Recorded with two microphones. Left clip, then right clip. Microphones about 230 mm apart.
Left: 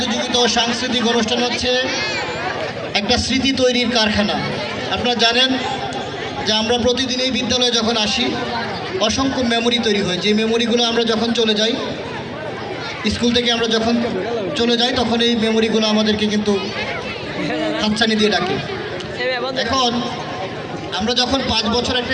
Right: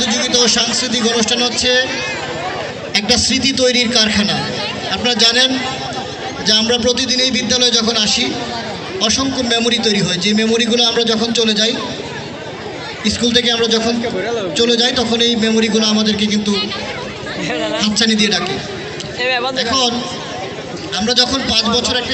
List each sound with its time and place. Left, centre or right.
0.0 s a man's voice: right
2.9 s a man's voice: right
13.1 s a man's voice: right
20.9 s a man's voice: right